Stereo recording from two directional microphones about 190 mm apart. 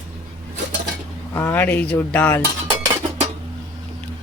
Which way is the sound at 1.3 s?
10° left (ahead or behind).